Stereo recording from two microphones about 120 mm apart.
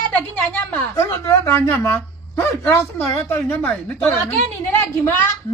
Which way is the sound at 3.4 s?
10° left (ahead or behind).